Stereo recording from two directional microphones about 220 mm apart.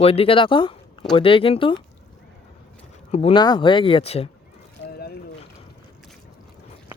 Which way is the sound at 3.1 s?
25° left (ahead or behind).